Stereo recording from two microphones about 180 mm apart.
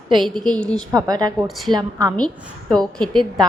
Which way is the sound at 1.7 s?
20° right (ahead or behind).